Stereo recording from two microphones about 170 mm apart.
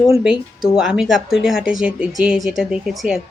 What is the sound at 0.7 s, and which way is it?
Speech, 5° right (ahead or behind).